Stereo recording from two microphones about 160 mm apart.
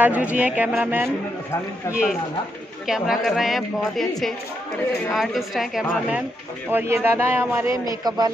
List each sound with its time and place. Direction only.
0.0 s a man's voice: 10° right (ahead or behind)
1.9 s speech: 15° left (ahead or behind)
2.9 s a woman's voice: 5° right (ahead or behind)
5.1 s a woman's voice: centre (ahead or behind)
6.7 s a man's voice: 15° right (ahead or behind)